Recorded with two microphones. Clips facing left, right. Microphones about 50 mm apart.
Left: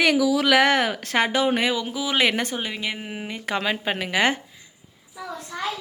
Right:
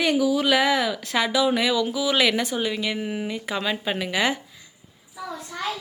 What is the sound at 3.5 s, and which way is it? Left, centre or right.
Speech, left.